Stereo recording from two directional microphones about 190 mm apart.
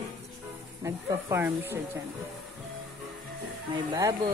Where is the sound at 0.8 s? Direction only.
10° right (ahead or behind).